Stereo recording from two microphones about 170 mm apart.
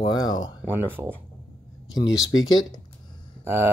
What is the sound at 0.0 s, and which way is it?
Speech, 25° left (ahead or behind).